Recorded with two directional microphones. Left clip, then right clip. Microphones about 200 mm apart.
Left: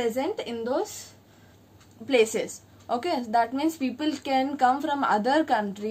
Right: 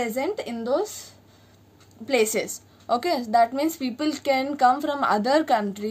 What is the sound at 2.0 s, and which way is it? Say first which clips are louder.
A woman's voice: even; 45° right (ahead or behind).